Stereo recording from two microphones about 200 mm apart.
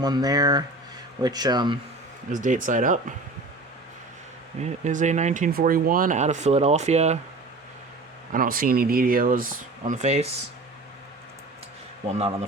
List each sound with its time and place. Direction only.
0.0 s speech: 20° right (ahead or behind)
2.3 s speech: 40° right (ahead or behind)
4.6 s speech: 40° right (ahead or behind)
8.3 s speech: 45° right (ahead or behind)
12.1 s speech: 30° right (ahead or behind)